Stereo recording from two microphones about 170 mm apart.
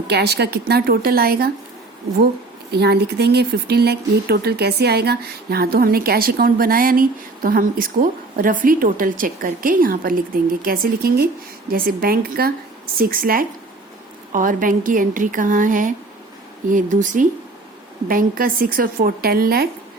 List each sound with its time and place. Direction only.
0.1 s a woman's voice: 75° right (ahead or behind)
2.7 s a woman's voice: 75° right (ahead or behind)